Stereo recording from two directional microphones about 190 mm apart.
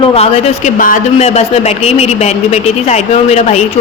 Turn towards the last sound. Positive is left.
turn(degrees=35)  # may be behind; listen again after turning